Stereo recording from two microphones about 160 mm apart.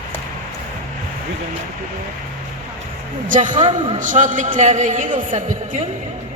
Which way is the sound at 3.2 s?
55° right (ahead or behind).